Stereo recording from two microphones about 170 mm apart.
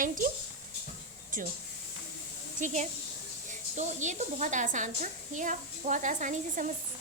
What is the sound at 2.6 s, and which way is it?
A woman's voice, 45° right (ahead or behind).